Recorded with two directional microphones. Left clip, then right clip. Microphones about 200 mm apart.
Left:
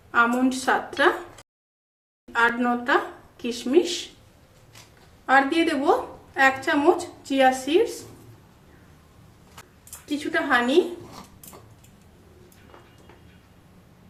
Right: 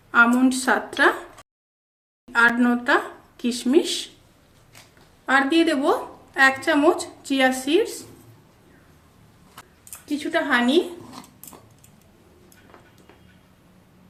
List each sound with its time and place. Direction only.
0.1 s a woman's voice: 45° right (ahead or behind)
2.6 s a woman's voice: 40° right (ahead or behind)
5.2 s a woman's voice: 35° right (ahead or behind)
10.2 s a woman's voice: 35° right (ahead or behind)